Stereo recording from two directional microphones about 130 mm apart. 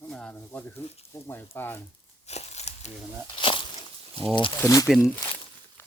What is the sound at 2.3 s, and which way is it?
Crumpling, 55° left (ahead or behind).